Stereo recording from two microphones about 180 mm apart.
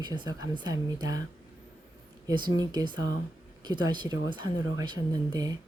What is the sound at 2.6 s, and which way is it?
Speech, 20° right (ahead or behind).